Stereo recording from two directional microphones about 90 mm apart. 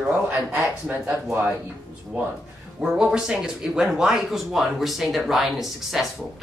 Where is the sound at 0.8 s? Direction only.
25° right (ahead or behind).